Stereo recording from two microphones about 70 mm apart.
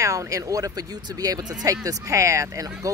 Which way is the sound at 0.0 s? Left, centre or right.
Right.